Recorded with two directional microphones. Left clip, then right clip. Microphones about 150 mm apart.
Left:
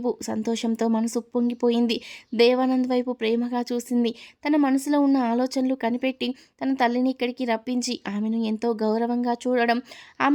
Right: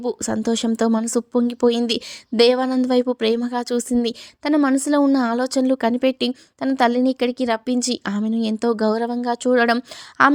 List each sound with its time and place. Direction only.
0.0 s a woman's voice: 30° right (ahead or behind)